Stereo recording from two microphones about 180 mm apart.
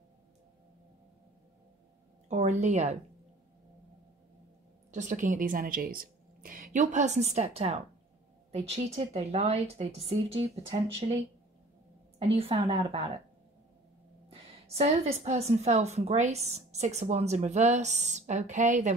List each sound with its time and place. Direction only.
2.2 s a woman's voice: 40° right (ahead or behind)
4.9 s a woman's voice: 45° right (ahead or behind)
12.4 s a woman's voice: 30° right (ahead or behind)
14.8 s a woman's voice: 35° right (ahead or behind)